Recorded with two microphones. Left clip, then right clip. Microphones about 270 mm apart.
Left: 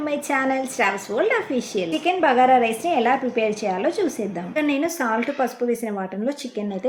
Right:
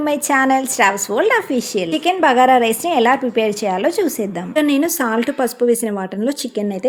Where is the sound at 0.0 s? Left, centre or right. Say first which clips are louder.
Right 7 dB; right.